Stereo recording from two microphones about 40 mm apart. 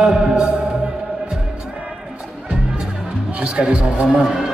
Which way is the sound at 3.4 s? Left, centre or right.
Right.